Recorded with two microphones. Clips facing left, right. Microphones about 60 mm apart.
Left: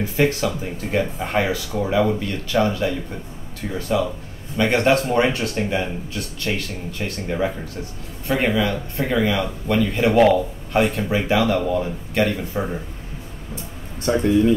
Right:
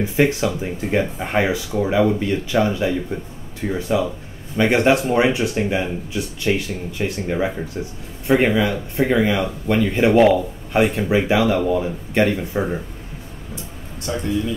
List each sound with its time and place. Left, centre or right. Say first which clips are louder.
0.0 s speech: right 2 dB; centre
10.1 s speech: right 1 dB; centre
10.7 s speech: right 2 dB; centre
12.1 s speech: right 3 dB; centre
14.1 s speech: left 6 dB; left